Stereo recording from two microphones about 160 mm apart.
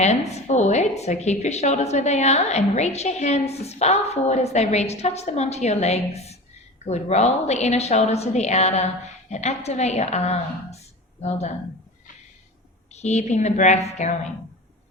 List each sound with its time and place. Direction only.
0.0 s a woman's voice: 45° left (ahead or behind)
12.9 s a woman's voice: 45° left (ahead or behind)